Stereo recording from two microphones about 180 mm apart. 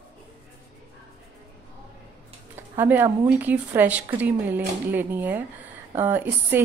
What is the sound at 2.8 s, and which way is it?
A woman's voice, 10° right (ahead or behind).